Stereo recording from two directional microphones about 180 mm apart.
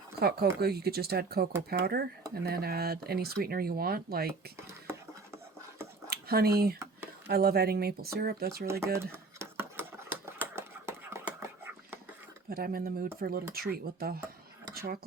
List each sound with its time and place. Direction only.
0.2 s speech: 60° right (ahead or behind)
4.5 s whispering: 15° right (ahead or behind)
6.1 s speech: 60° right (ahead or behind)
8.8 s speech: 15° right (ahead or behind)
9.1 s a sound: 15° right (ahead or behind)
12.5 s speech: 55° right (ahead or behind)
14.7 s a sound: 55° right (ahead or behind)